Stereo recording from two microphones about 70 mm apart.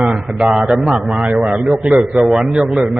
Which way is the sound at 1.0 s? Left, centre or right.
Centre.